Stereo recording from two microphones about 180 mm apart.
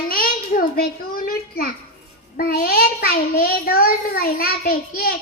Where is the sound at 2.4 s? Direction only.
55° left (ahead or behind).